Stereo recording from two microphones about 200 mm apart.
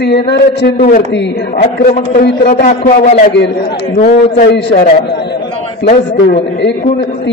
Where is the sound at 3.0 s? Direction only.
35° left (ahead or behind).